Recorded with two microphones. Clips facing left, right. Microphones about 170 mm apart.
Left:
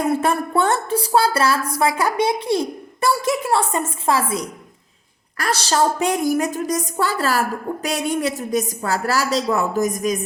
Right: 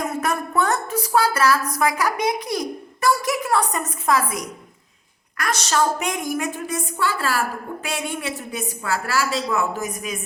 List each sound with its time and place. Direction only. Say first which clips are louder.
0.0 s a woman's voice: left 5 dB; 30° left (ahead or behind)